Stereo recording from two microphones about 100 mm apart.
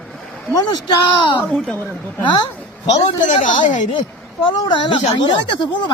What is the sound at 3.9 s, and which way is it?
Speech, 60° left (ahead or behind).